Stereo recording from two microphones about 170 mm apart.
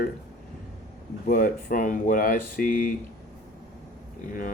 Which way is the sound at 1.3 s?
55° left (ahead or behind).